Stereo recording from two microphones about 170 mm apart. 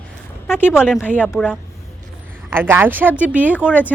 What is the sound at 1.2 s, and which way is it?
A woman's voice, 5° right (ahead or behind).